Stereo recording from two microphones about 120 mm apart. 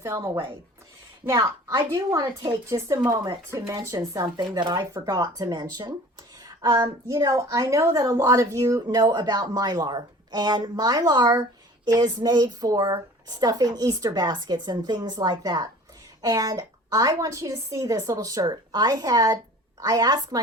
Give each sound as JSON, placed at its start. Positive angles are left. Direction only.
{"t": 0.0, "sound": "a woman's voice", "side_deg": -30}
{"t": 2.9, "sound": "a woman's voice", "side_deg": -40}
{"t": 3.8, "sound": "a woman's voice", "side_deg": -30}